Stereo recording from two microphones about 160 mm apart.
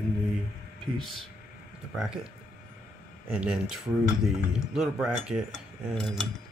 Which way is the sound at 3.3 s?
5° right (ahead or behind).